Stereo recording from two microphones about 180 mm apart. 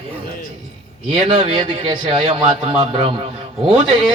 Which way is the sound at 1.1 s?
30° right (ahead or behind).